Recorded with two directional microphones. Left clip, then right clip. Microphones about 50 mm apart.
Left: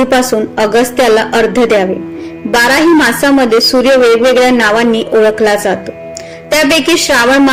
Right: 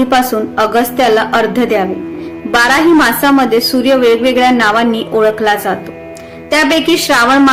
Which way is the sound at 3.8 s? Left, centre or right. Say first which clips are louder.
Left 1 dB; left.